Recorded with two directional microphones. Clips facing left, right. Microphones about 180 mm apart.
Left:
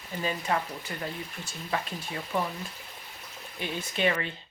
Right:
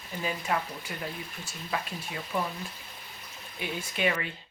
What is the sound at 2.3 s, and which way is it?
Speech, 20° left (ahead or behind).